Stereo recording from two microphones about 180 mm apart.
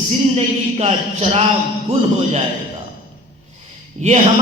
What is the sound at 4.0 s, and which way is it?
Speech, 40° right (ahead or behind).